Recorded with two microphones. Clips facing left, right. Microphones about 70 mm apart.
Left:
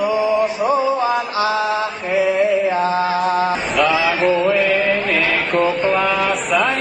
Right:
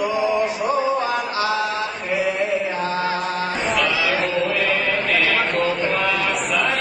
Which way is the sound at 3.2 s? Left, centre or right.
Left.